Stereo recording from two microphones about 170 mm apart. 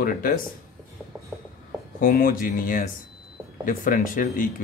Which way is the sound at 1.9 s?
55° left (ahead or behind).